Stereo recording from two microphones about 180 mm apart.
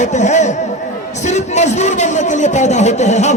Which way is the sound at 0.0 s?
40° left (ahead or behind).